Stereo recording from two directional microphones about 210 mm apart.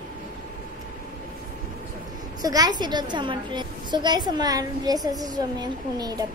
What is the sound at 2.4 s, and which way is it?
A woman's voice, 20° right (ahead or behind).